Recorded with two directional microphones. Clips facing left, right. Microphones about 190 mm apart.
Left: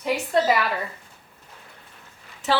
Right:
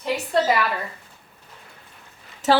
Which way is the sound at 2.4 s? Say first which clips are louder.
Right 5 dB; 40° right (ahead or behind).